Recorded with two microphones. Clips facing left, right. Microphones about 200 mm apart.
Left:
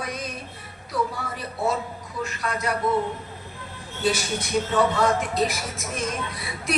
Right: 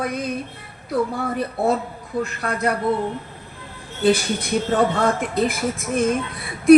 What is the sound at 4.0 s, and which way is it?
Speech, 55° right (ahead or behind).